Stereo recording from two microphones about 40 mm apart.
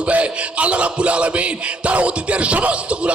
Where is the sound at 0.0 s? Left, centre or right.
Right.